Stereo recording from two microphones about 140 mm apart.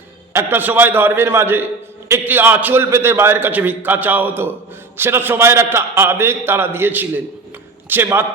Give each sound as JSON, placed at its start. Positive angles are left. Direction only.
{"t": 0.3, "sound": "a man's voice", "side_deg": -15}